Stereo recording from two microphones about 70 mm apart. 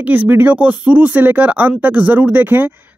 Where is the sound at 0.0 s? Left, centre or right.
Right.